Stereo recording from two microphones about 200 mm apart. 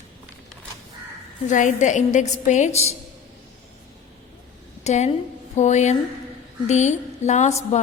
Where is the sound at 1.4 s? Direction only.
40° left (ahead or behind).